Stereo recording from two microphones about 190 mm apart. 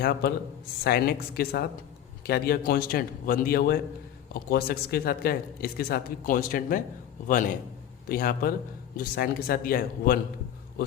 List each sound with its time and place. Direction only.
0.0 s a woman's voice: 55° left (ahead or behind)